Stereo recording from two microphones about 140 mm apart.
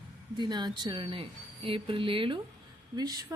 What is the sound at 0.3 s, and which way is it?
Speech, 30° right (ahead or behind).